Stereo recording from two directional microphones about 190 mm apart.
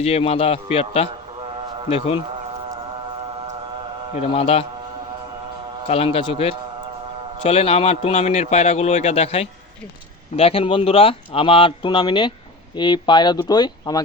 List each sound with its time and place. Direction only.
0.0 s a man's voice: 30° left (ahead or behind)
4.2 s a man's voice: 30° left (ahead or behind)
5.9 s a man's voice: 30° left (ahead or behind)